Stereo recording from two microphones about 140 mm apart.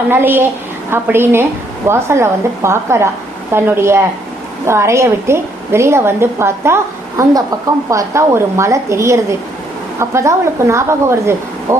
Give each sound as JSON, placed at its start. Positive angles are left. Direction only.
{"t": 0.1, "sound": "a woman's voice", "side_deg": -15}
{"t": 7.9, "sound": "a woman's voice", "side_deg": -20}